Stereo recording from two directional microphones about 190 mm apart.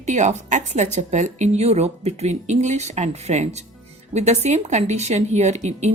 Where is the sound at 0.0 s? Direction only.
40° right (ahead or behind).